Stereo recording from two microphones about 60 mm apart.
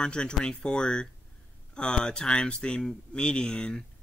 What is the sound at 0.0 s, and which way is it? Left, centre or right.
Speech, centre.